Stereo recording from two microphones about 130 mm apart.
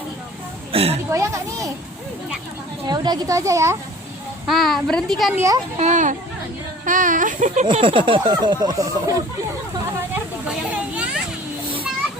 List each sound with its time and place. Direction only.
0.7 s a woman's voice: 50° right (ahead or behind)
1.1 s speech: 20° right (ahead or behind)
2.8 s speech: 35° right (ahead or behind)
4.4 s a woman's voice: centre (ahead or behind)
5.7 s speech: 60° right (ahead or behind)
6.8 s speech: 85° right
7.7 s speech: 40° right (ahead or behind)
10.9 s children playing: 10° right (ahead or behind)